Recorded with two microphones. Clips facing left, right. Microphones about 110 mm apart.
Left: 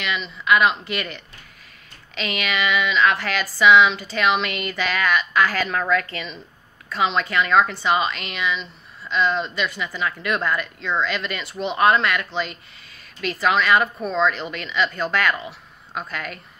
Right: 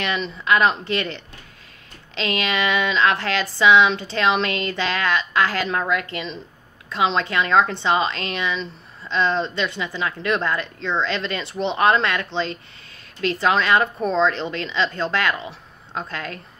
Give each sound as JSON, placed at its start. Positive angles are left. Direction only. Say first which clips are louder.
{"t": 0.0, "sound": "a woman's voice", "louder": "right 2 dB", "side_deg": -35}